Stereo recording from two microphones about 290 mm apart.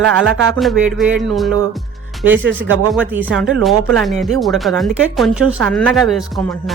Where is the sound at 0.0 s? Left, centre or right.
Right.